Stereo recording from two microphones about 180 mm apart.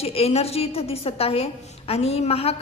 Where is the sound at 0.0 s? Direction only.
35° left (ahead or behind).